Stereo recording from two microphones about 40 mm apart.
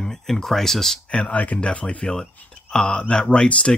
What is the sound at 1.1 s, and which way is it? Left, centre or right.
Speech, left.